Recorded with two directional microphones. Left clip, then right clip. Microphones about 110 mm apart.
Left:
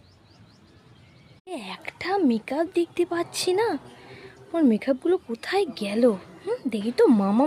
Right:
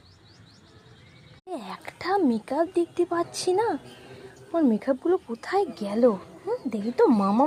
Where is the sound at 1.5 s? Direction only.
15° left (ahead or behind).